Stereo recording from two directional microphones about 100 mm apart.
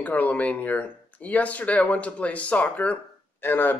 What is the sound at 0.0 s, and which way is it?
Speech, 15° left (ahead or behind).